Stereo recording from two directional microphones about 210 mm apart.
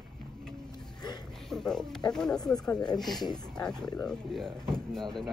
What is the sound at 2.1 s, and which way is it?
Speech, 5° left (ahead or behind).